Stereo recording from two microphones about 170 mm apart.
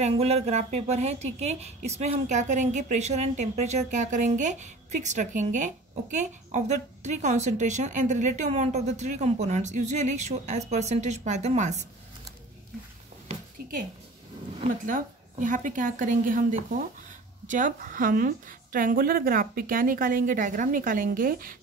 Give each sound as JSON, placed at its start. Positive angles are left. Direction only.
{"t": 0.0, "sound": "a woman's voice", "side_deg": -40}
{"t": 14.9, "sound": "a woman's voice", "side_deg": -50}